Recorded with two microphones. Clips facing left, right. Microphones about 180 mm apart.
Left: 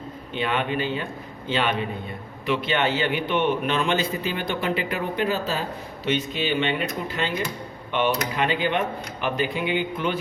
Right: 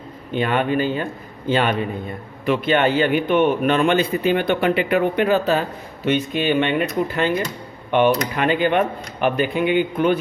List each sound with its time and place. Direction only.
0.3 s a man's voice: 50° right (ahead or behind)